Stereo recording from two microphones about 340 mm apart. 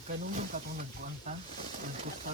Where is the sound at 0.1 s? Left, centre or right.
Right.